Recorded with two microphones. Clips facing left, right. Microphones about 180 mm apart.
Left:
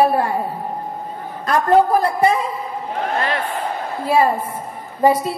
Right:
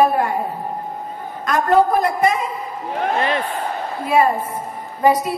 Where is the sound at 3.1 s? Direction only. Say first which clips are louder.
Right 1 dB; 20° right (ahead or behind).